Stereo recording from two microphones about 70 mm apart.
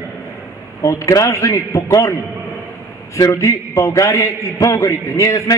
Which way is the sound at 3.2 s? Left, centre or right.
Left.